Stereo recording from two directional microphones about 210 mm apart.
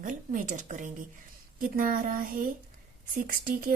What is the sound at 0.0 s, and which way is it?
A woman's voice, 40° right (ahead or behind).